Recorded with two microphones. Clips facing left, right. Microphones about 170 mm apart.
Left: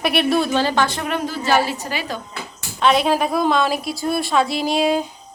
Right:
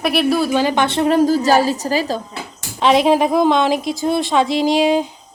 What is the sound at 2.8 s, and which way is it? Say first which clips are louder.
A woman's voice: right 4 dB; 20° right (ahead or behind).